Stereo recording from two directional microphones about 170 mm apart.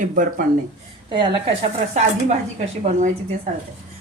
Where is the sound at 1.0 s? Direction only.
30° right (ahead or behind).